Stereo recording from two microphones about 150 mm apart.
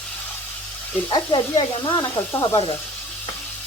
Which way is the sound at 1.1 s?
35° left (ahead or behind).